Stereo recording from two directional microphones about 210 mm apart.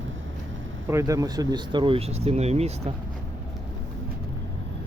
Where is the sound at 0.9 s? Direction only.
15° right (ahead or behind); by 2.9 s 30° right (ahead or behind).